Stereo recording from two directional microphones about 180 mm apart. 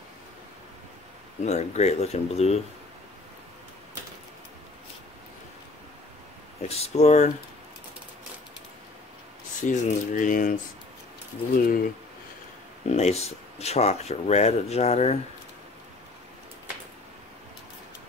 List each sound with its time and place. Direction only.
1.4 s speech: 35° left (ahead or behind)
6.7 s speech: 35° left (ahead or behind)
9.6 s speech: 45° left (ahead or behind)
12.8 s speech: 40° left (ahead or behind)